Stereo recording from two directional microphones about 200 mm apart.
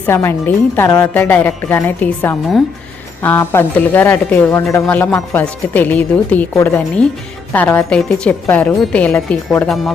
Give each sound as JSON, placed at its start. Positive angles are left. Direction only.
{"t": 0.0, "sound": "a woman's voice", "side_deg": 10}